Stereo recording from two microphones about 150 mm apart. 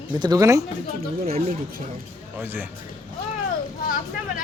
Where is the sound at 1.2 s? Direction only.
45° right (ahead or behind).